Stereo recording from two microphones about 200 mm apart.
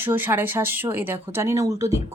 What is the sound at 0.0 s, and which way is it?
A woman's voice, 10° right (ahead or behind).